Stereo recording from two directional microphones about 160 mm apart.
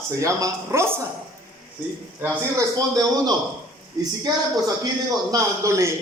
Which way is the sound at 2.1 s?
15° right (ahead or behind).